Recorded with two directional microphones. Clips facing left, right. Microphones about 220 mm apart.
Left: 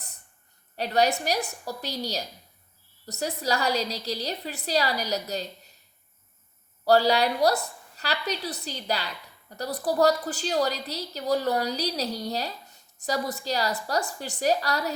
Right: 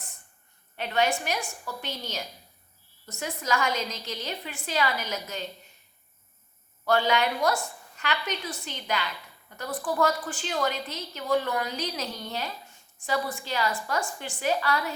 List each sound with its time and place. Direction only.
0.8 s a woman's voice: 40° left (ahead or behind)
6.8 s a woman's voice: 35° left (ahead or behind)